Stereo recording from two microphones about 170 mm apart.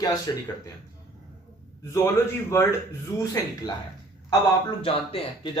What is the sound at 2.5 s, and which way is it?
Speech, 15° left (ahead or behind).